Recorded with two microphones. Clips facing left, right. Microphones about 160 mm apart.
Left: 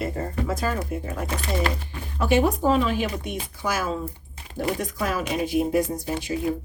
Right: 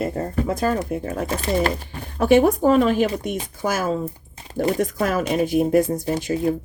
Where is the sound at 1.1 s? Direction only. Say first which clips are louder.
Right 6 dB; 40° right (ahead or behind).